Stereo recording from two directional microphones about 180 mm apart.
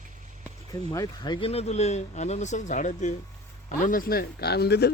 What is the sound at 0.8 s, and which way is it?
Speech, 20° left (ahead or behind).